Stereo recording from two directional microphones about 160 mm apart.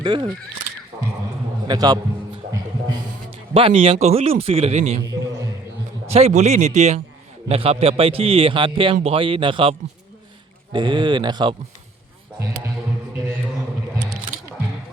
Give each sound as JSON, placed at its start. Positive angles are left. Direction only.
{"t": 0.0, "sound": "speech", "side_deg": -30}
{"t": 1.6, "sound": "a sound", "side_deg": -25}
{"t": 4.0, "sound": "a man's voice", "side_deg": -40}
{"t": 6.1, "sound": "a man's voice", "side_deg": -40}